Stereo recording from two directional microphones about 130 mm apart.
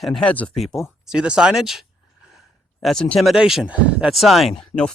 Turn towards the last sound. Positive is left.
turn(degrees=5)  # may be behind; listen again after turning